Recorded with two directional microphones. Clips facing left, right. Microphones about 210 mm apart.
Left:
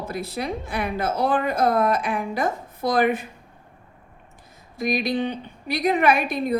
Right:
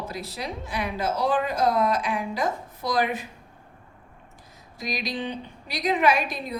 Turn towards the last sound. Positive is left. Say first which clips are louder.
# left 3 dB
turn(degrees=55)  # may be behind; listen again after turning